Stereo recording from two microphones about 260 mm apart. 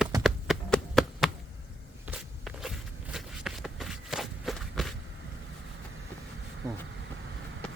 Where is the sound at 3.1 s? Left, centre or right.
Centre.